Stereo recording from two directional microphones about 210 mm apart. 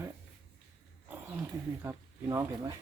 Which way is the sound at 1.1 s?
5° right (ahead or behind).